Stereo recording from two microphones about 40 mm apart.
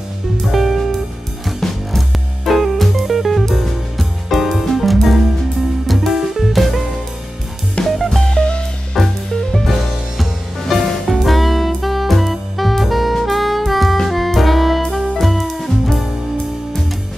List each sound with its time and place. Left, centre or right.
0.5 s music: centre
7.8 s music: centre
8.2 s music: centre
8.9 s music: centre
9.7 s music: centre